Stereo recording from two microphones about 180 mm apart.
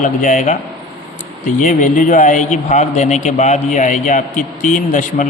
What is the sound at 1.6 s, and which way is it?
Speech, 45° left (ahead or behind).